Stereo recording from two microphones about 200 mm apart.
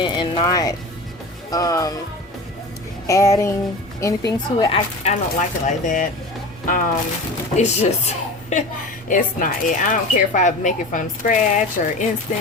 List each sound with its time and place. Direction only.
0.0 s speech: 25° left (ahead or behind)
3.1 s a woman's voice: 15° left (ahead or behind)
5.0 s a woman's voice: 35° left (ahead or behind)